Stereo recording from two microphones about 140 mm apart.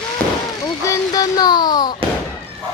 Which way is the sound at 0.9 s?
25° left (ahead or behind).